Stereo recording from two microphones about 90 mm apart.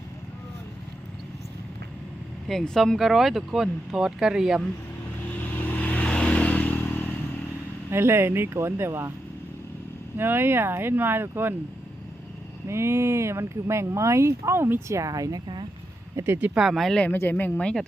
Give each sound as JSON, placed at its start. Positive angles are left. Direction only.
{"t": 2.5, "sound": "speech", "side_deg": 5}
{"t": 5.6, "sound": "vehicle", "side_deg": 20}
{"t": 7.9, "sound": "speech", "side_deg": -30}
{"t": 10.2, "sound": "speech", "side_deg": -25}
{"t": 12.6, "sound": "speech", "side_deg": -30}
{"t": 16.1, "sound": "speech", "side_deg": -25}
{"t": 16.6, "sound": "speech", "side_deg": 0}
{"t": 17.0, "sound": "speech", "side_deg": 20}